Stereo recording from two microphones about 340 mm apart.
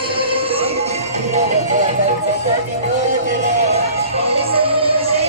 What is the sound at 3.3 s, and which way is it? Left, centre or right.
Music, centre.